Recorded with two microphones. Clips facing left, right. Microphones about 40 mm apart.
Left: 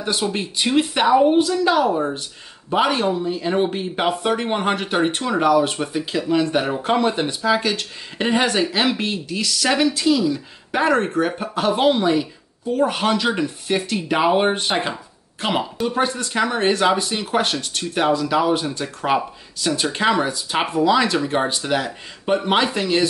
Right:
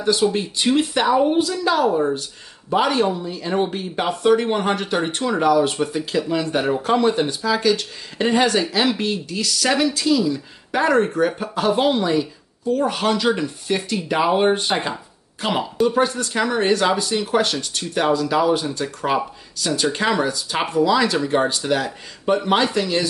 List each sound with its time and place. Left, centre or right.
0.0 s speech: centre
4.2 s speech: centre
5.3 s speech: centre
6.8 s speech: left
10.9 s speech: centre
12.2 s speech: left
16.0 s speech: centre
16.6 s speech: left; by 21.5 s centre
21.5 s speech: centre